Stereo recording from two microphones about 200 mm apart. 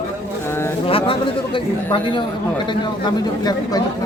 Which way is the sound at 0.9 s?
25° left (ahead or behind).